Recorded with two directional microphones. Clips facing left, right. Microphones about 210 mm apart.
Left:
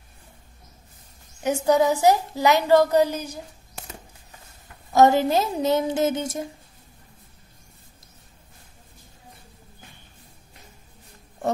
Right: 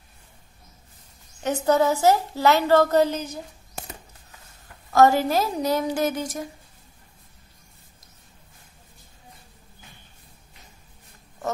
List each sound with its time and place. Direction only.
1.4 s a woman's voice: 15° left (ahead or behind)
4.9 s a woman's voice: 20° left (ahead or behind)